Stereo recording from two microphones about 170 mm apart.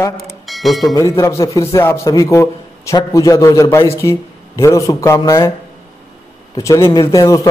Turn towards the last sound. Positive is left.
turn(degrees=20)  # may be behind; listen again after turning